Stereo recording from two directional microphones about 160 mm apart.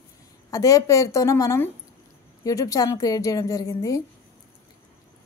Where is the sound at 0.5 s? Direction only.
20° left (ahead or behind).